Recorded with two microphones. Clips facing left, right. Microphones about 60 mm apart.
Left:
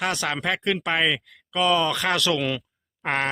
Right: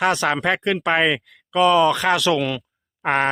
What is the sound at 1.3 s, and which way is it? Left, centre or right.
Speech, centre.